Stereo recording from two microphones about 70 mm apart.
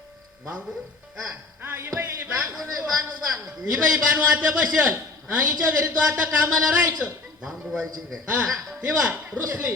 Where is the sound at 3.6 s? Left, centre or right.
Centre.